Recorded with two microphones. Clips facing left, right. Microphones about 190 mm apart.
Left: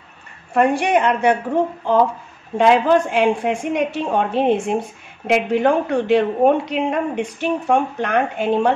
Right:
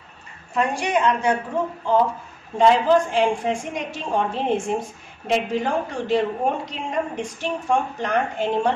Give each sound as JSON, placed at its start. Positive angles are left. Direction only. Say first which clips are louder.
{"t": 0.6, "sound": "a woman's voice", "louder": "left 6 dB", "side_deg": 60}
{"t": 2.5, "sound": "a woman's voice", "louder": "left 2 dB", "side_deg": 65}